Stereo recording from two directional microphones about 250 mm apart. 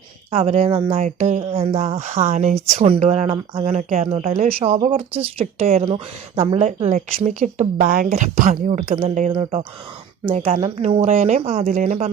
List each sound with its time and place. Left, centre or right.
0.3 s speech: right